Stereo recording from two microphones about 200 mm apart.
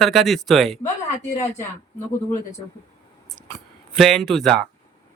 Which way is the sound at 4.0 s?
Centre (ahead or behind).